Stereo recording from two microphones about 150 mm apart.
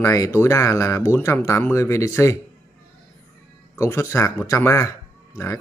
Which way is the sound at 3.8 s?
20° left (ahead or behind).